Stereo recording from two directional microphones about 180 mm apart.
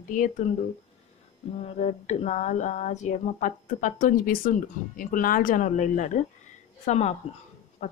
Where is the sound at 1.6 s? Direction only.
35° left (ahead or behind).